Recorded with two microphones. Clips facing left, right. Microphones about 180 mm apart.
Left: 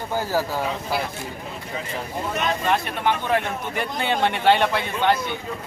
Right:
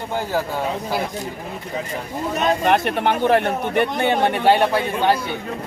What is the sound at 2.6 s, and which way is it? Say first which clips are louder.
Speech: right 3 dB; 60° right (ahead or behind).